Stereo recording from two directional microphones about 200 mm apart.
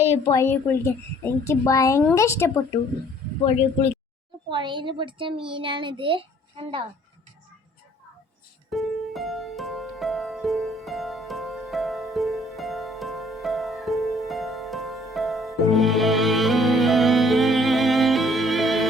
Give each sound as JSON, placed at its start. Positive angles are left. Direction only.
{"t": 0.3, "sound": "a woman's voice", "side_deg": 15}
{"t": 4.4, "sound": "a child's voice", "side_deg": -25}
{"t": 8.7, "sound": "music", "side_deg": 0}